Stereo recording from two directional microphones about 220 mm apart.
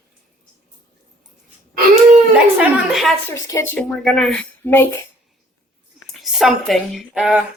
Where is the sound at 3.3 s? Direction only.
15° left (ahead or behind).